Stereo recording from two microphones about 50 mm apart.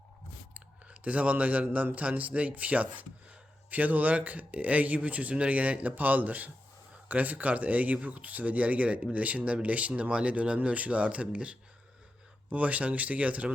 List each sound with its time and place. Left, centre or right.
0.5 s chewing: right
1.7 s speech: right